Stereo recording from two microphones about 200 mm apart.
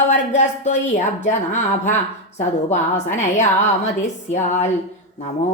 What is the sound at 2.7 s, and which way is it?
A woman's voice, 35° left (ahead or behind).